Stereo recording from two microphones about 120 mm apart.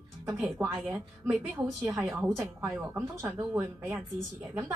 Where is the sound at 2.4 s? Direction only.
20° right (ahead or behind).